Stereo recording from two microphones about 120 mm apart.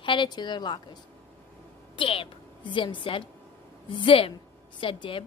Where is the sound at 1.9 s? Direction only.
45° left (ahead or behind).